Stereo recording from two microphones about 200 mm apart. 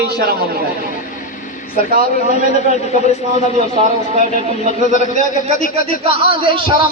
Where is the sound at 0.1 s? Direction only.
50° right (ahead or behind).